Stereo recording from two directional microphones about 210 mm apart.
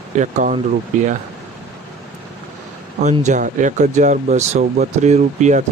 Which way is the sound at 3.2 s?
35° right (ahead or behind).